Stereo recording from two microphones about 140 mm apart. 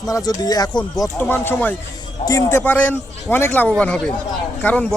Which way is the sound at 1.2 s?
15° left (ahead or behind).